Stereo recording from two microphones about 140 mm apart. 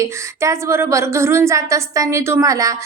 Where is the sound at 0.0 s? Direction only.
20° right (ahead or behind).